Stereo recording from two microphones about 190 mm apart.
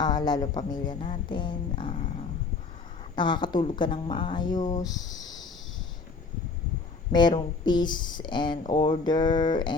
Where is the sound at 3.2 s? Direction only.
25° left (ahead or behind).